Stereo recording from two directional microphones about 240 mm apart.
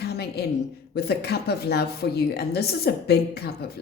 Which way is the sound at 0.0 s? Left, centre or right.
Left.